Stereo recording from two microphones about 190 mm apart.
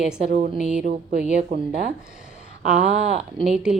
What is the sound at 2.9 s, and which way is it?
Speech, 35° right (ahead or behind).